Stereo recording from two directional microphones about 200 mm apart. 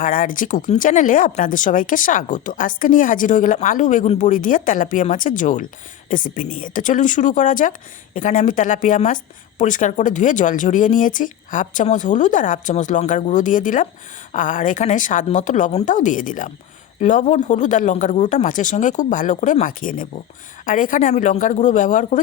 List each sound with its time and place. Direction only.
0.0 s speech: 45° left (ahead or behind)